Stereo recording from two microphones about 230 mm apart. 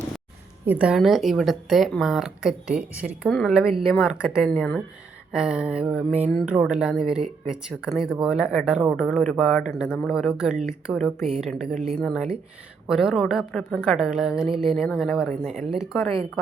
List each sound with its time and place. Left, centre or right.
0.6 s a woman's voice: centre